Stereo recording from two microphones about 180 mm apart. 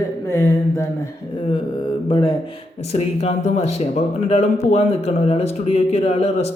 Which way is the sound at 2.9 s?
35° left (ahead or behind).